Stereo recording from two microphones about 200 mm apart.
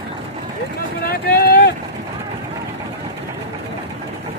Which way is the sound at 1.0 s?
50° left (ahead or behind).